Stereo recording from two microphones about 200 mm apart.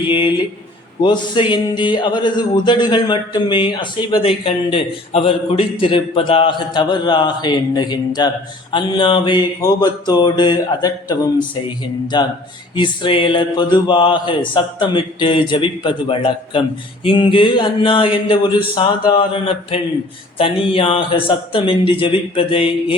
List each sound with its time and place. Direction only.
0.1 s mantra: 25° left (ahead or behind)